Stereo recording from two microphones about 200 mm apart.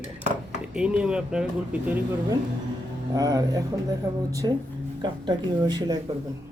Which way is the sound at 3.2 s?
20° right (ahead or behind).